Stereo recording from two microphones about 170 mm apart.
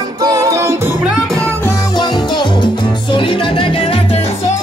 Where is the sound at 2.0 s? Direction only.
25° left (ahead or behind).